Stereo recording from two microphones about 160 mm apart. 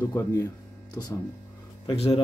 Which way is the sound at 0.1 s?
20° left (ahead or behind).